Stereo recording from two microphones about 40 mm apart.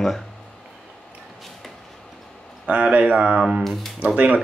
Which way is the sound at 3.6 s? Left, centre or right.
Centre.